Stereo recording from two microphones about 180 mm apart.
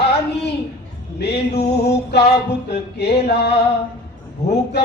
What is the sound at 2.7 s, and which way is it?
Music, 65° left (ahead or behind).